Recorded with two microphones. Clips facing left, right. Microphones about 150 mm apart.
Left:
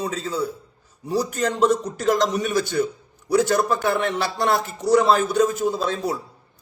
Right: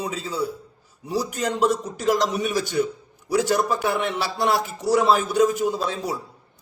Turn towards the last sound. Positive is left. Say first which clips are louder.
# left 2 dB
turn(degrees=-10)  # may be behind; listen again after turning